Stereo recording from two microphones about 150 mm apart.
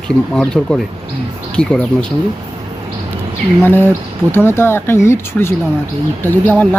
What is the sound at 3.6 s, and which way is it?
Speech, 15° left (ahead or behind).